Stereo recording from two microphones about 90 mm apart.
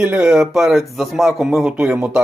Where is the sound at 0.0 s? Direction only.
15° right (ahead or behind).